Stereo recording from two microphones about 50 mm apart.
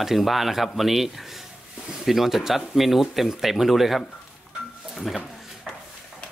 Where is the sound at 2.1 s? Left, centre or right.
Centre.